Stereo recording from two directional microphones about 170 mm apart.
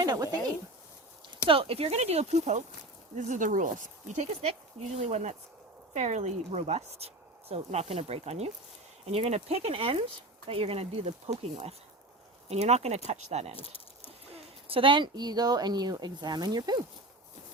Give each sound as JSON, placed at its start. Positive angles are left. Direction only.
{"t": 0.0, "sound": "speech", "side_deg": -20}
{"t": 1.5, "sound": "speech", "side_deg": -35}
{"t": 13.6, "sound": "a sound", "side_deg": 35}
{"t": 14.3, "sound": "speech", "side_deg": -30}